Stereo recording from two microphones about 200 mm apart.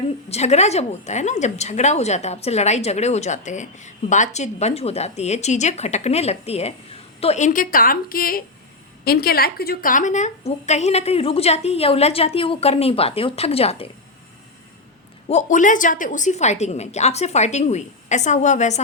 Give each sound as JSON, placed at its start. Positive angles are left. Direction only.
{"t": 0.3, "sound": "speech", "side_deg": 35}
{"t": 15.3, "sound": "speech", "side_deg": 35}